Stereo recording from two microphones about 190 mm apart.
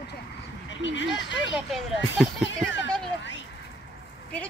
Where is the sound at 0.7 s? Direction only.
70° left (ahead or behind).